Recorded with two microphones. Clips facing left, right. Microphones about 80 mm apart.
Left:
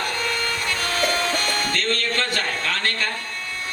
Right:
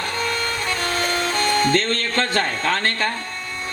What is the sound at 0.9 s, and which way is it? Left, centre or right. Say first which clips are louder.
Music: left 1 dB; right.